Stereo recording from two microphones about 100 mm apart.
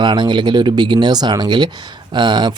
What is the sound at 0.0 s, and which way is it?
Speech, 50° right (ahead or behind).